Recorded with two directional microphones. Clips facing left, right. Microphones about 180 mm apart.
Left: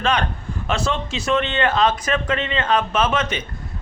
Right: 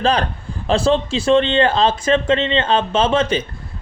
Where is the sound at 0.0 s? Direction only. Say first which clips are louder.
Right 3 dB; 35° right (ahead or behind).